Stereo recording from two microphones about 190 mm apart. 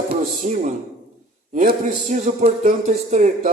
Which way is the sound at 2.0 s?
40° right (ahead or behind).